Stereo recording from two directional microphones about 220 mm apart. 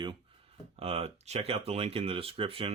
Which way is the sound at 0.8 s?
25° right (ahead or behind).